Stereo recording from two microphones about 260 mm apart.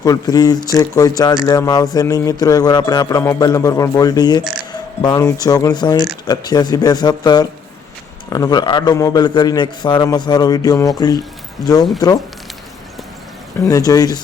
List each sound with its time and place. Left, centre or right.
0.0 s speech: centre
13.7 s speech: centre